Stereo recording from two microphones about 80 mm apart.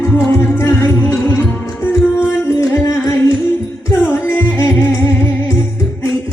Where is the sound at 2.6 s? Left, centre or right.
Left.